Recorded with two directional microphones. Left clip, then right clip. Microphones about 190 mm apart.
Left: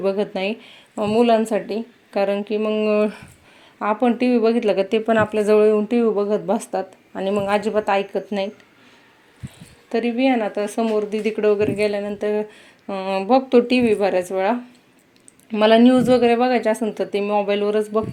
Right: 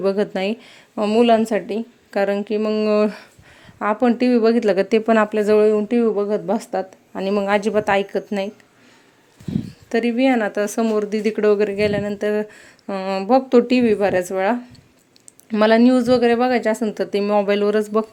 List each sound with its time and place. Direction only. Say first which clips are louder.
0.0 s speech: right 1 dB; 20° right (ahead or behind)
9.9 s speech: right 1 dB; 20° right (ahead or behind)